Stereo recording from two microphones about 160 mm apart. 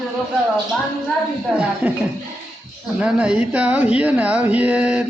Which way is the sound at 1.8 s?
10° right (ahead or behind).